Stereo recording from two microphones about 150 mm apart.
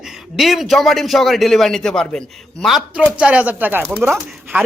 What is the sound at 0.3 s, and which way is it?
Speech, centre (ahead or behind).